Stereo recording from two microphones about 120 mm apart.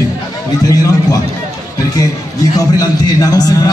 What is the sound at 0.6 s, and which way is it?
Speech, 30° left (ahead or behind).